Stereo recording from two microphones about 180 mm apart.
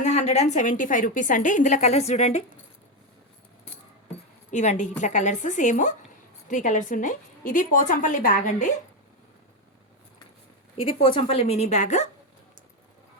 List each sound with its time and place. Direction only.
0.0 s a woman's voice: 40° left (ahead or behind)
4.5 s a woman's voice: 40° left (ahead or behind)
10.8 s a woman's voice: 30° left (ahead or behind)